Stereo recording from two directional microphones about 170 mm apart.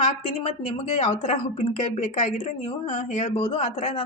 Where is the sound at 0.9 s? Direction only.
50° left (ahead or behind).